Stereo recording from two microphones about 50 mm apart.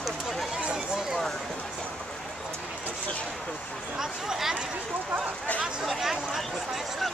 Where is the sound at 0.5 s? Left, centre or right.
Centre.